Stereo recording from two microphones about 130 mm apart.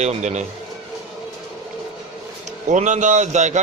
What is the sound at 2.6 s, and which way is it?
Speech, 65° right (ahead or behind).